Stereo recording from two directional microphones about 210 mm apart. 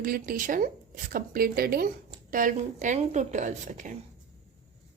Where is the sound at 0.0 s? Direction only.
45° right (ahead or behind).